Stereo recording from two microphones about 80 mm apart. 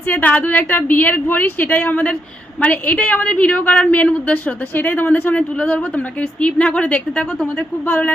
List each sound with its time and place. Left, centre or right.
0.1 s a woman's voice: centre